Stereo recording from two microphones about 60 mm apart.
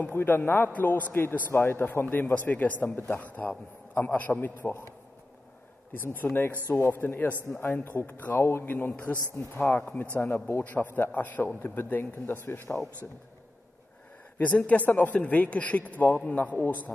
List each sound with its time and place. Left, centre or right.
0.1 s a man's voice: left
5.9 s a man's voice: left
8.4 s a man's voice: left
8.9 s a man's voice: left
9.4 s a man's voice: left
9.7 s a man's voice: left
14.4 s a man's voice: left